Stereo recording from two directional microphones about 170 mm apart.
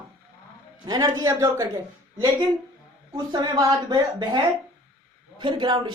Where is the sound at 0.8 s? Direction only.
20° right (ahead or behind).